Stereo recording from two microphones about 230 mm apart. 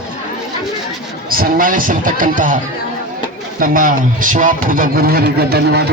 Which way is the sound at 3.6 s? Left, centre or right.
Right.